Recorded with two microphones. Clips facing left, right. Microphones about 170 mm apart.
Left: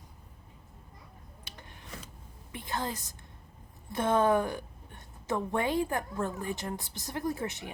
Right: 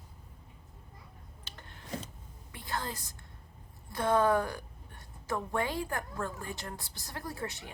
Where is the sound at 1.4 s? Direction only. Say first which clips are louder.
Even; 15° left (ahead or behind).